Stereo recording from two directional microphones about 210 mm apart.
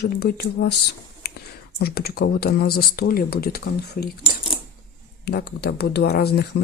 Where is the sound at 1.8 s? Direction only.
45° left (ahead or behind).